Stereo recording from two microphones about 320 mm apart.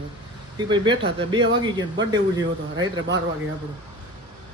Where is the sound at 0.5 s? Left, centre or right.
Centre.